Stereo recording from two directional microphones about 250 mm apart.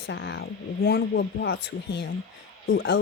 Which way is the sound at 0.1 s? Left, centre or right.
Left.